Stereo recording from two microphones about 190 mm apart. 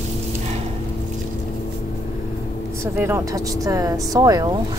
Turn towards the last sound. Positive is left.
turn(degrees=-20)  # may be behind; listen again after turning